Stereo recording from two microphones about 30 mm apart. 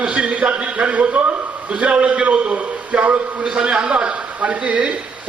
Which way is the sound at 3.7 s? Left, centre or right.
Right.